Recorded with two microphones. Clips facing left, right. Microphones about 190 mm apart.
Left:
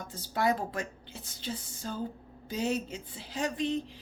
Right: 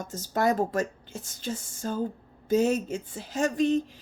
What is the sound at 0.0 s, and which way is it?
Speech, 45° right (ahead or behind).